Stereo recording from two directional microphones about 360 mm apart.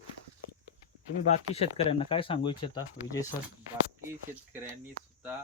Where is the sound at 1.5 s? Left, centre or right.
Centre.